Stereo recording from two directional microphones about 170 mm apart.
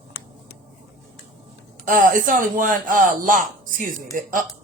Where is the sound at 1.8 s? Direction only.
50° right (ahead or behind).